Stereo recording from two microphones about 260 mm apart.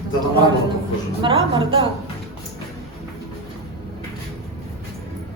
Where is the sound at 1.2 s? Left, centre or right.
Centre.